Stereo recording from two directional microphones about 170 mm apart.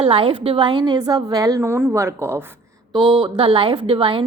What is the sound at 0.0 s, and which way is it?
A woman's voice, 30° right (ahead or behind).